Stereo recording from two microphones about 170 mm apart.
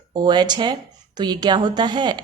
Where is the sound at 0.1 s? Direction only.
25° right (ahead or behind).